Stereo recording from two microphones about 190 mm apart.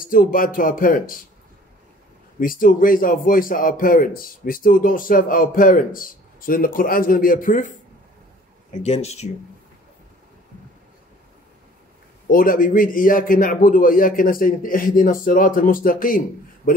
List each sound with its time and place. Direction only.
0.0 s a man's voice: 45° left (ahead or behind)
2.4 s a man's voice: 45° left (ahead or behind)
8.7 s speech: 35° left (ahead or behind)
12.3 s a man's voice: 45° left (ahead or behind)